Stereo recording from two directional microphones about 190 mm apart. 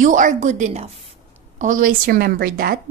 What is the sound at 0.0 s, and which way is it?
A woman's voice, 40° right (ahead or behind).